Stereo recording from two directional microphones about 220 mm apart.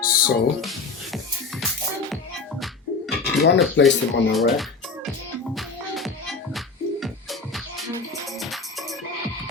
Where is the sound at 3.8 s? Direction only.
55° left (ahead or behind).